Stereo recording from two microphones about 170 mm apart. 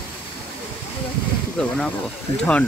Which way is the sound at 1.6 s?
5° left (ahead or behind).